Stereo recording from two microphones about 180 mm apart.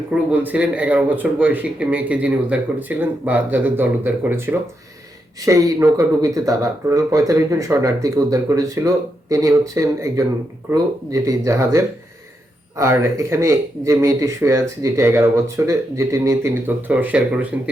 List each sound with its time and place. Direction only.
0.1 s speech: 5° right (ahead or behind)